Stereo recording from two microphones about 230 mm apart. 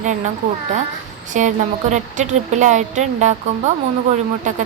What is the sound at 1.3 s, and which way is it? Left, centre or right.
Speech, right.